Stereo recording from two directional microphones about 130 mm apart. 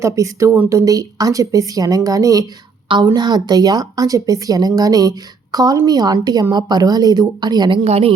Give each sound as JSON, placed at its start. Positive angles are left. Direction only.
{"t": 0.0, "sound": "speech", "side_deg": -25}
{"t": 7.9, "sound": "speech", "side_deg": -50}